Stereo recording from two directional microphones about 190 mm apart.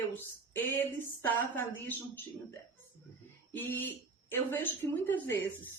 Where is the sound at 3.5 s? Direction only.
10° left (ahead or behind).